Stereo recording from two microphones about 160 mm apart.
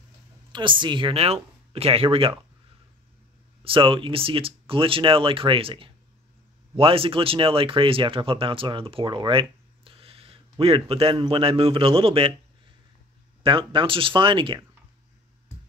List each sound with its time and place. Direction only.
0.5 s speech: 30° right (ahead or behind)
3.6 s speech: 35° right (ahead or behind)
13.4 s speech: 35° right (ahead or behind)